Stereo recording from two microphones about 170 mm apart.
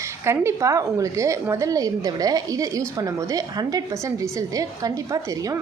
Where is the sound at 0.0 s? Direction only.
15° right (ahead or behind).